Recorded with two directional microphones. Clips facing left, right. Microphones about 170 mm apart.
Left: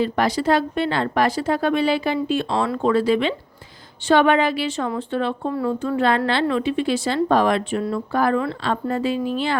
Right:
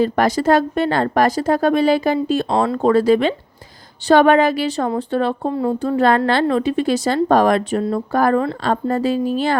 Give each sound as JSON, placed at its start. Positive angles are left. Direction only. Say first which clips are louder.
{"t": 0.0, "sound": "a woman's voice", "louder": "right 4 dB", "side_deg": -45}
{"t": 5.5, "sound": "speech", "louder": "right 3 dB", "side_deg": -25}
{"t": 6.0, "sound": "a woman's voice", "louder": "right 5 dB", "side_deg": -45}